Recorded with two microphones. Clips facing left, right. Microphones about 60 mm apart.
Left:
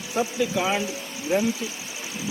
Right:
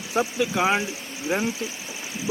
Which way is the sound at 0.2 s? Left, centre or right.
Right.